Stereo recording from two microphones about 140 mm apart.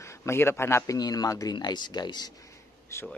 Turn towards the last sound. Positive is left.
turn(degrees=20)  # may be behind; listen again after turning